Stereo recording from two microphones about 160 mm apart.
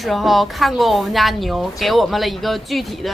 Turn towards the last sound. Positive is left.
turn(degrees=0)  # may be behind; listen again after turning